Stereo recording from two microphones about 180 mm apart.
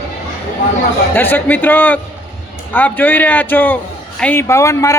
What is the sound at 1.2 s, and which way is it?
A man's voice, 10° left (ahead or behind).